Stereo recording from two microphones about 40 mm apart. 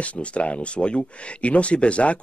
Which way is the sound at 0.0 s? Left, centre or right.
Left.